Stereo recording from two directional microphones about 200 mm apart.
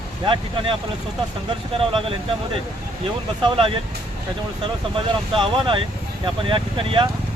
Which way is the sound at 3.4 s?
25° right (ahead or behind).